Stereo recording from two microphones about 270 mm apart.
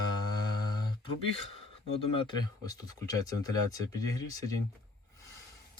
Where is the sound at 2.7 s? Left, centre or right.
Centre.